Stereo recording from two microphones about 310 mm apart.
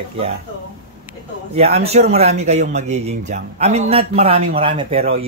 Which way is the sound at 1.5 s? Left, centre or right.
Centre.